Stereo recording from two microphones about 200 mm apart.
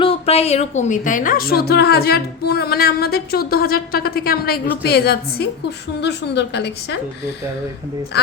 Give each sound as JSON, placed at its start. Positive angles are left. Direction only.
{"t": 0.0, "sound": "a woman's voice", "side_deg": 30}
{"t": 8.1, "sound": "speech", "side_deg": 55}